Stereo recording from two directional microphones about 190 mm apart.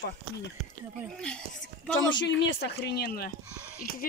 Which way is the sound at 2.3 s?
70° left (ahead or behind).